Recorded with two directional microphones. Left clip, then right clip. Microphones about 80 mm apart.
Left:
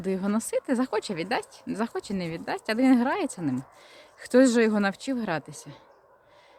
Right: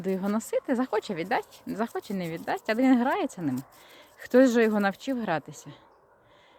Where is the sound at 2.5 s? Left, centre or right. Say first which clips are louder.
Left 1 dB; centre.